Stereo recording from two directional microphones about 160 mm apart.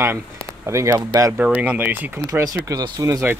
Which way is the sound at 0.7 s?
15° right (ahead or behind).